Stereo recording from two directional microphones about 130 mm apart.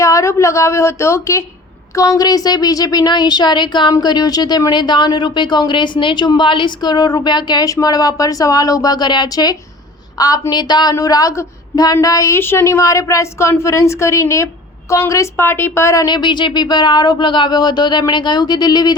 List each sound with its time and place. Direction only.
0.0 s a woman's voice: 25° left (ahead or behind)